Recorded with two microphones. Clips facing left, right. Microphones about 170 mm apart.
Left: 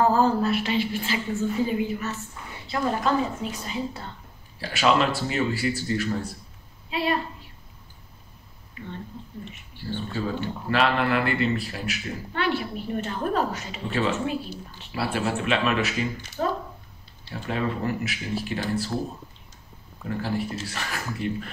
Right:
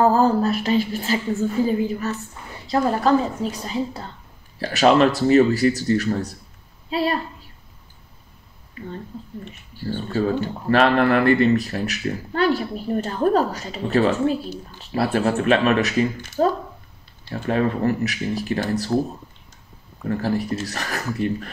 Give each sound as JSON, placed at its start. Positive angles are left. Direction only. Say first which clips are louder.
{"t": 0.0, "sound": "a woman's voice", "louder": "right 4 dB", "side_deg": -40}
{"t": 9.8, "sound": "speech", "louder": "right 7 dB", "side_deg": -45}
{"t": 20.2, "sound": "speech", "louder": "right 4 dB", "side_deg": -40}